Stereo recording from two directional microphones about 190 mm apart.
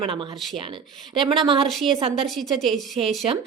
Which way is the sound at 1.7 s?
Centre (ahead or behind).